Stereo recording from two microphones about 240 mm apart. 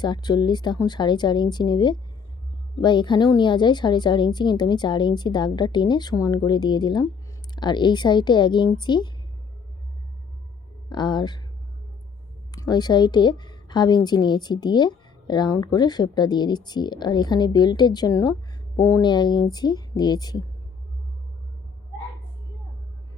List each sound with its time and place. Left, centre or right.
0.0 s a woman's voice: centre
10.8 s speech: centre
12.5 s a woman's voice: centre